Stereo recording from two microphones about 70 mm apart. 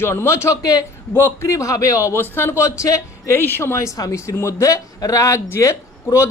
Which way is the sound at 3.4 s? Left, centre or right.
Left.